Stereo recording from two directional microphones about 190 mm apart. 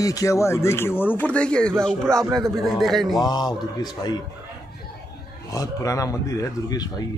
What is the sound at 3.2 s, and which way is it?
Speech, 20° left (ahead or behind).